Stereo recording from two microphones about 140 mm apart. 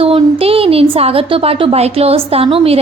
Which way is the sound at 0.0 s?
45° right (ahead or behind).